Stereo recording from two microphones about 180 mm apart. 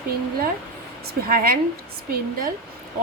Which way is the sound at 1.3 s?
55° right (ahead or behind).